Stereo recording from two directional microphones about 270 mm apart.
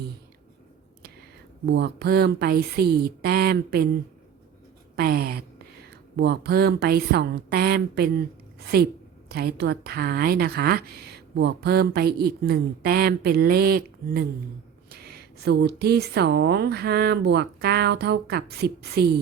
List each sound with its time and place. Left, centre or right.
1.6 s speech: right
4.9 s speech: right
9.3 s speech: right